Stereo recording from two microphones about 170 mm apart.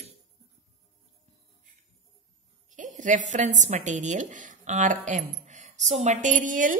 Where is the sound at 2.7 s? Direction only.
50° right (ahead or behind).